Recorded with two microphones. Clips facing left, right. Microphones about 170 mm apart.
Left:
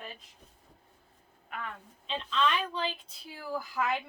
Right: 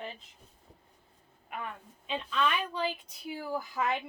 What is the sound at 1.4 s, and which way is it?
A woman's voice, 15° right (ahead or behind).